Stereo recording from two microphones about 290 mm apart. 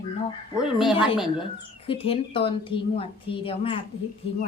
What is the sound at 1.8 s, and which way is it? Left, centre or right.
A woman's voice, centre.